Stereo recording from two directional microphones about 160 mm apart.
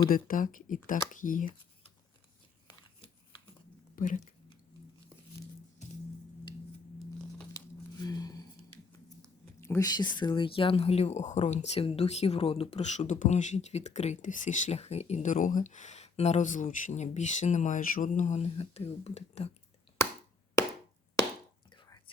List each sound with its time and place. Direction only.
0.1 s speech: 60° left (ahead or behind)
3.9 s speech: 55° left (ahead or behind)
7.5 s a sound: 25° left (ahead or behind)
9.6 s speech: 20° left (ahead or behind); by 19.5 s 40° left (ahead or behind)
21.7 s whispering: 25° left (ahead or behind)